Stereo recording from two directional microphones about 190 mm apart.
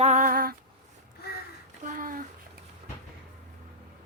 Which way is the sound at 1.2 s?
55° left (ahead or behind).